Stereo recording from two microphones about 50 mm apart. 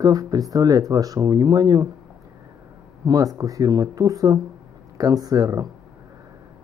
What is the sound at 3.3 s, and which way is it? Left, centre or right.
Speech, right.